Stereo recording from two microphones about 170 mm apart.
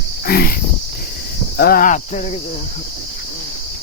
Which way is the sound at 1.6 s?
60° left (ahead or behind).